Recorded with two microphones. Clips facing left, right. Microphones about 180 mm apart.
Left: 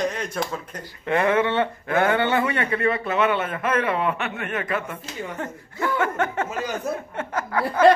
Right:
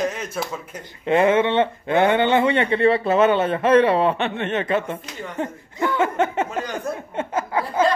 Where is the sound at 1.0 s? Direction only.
25° right (ahead or behind).